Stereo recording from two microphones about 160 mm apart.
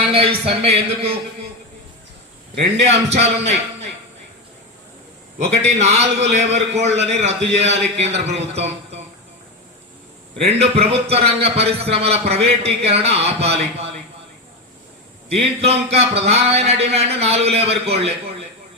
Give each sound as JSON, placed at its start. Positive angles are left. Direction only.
{"t": 0.0, "sound": "a man's voice", "side_deg": -35}
{"t": 2.6, "sound": "a man's voice", "side_deg": -45}
{"t": 5.6, "sound": "a man's voice", "side_deg": -45}
{"t": 10.4, "sound": "a man's voice", "side_deg": -40}
{"t": 15.3, "sound": "a man's voice", "side_deg": -40}